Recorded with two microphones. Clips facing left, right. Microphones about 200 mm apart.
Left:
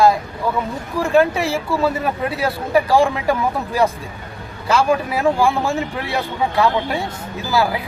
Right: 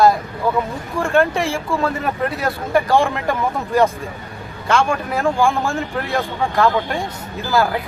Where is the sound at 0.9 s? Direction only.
Centre (ahead or behind).